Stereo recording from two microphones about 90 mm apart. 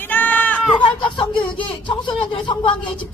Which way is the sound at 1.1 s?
65° left (ahead or behind).